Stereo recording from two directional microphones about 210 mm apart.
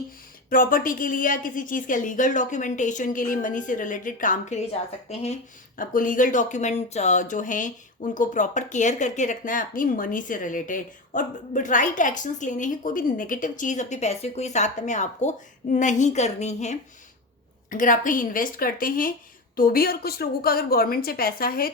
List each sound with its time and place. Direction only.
0.5 s a woman's voice: 40° left (ahead or behind)